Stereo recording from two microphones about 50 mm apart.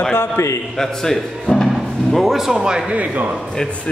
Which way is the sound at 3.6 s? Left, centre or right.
Centre.